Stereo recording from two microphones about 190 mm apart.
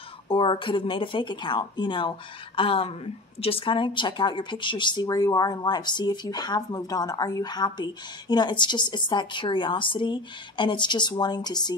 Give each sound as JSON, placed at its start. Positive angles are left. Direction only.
{"t": 0.3, "sound": "a woman's voice", "side_deg": 25}